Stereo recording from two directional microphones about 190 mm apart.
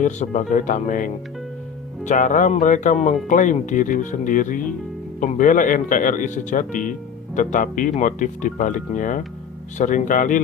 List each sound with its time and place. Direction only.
0.0 s speech: 40° left (ahead or behind)